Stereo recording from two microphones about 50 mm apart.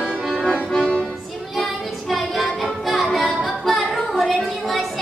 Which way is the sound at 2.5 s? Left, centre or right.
Centre.